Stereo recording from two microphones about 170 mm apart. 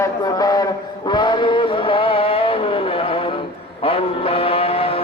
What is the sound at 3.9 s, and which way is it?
Mantra, 35° left (ahead or behind).